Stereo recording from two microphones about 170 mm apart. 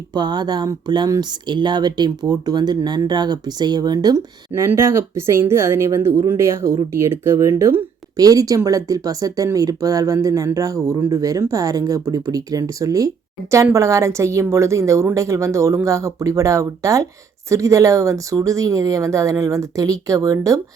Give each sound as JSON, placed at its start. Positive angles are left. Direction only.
{"t": 0.1, "sound": "a woman's voice", "side_deg": -25}